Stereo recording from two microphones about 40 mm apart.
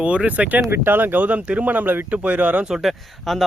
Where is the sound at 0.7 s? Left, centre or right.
Right.